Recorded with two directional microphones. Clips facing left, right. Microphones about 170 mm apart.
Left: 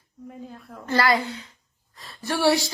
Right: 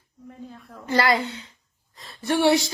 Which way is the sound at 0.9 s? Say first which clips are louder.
Even; 25° right (ahead or behind).